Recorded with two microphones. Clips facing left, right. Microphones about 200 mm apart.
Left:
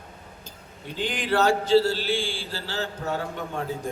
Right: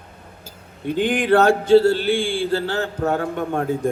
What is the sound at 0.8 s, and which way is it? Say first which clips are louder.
A man's voice: right 10 dB; 55° right (ahead or behind).